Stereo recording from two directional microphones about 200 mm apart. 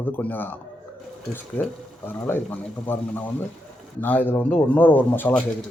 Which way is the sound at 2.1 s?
10° left (ahead or behind).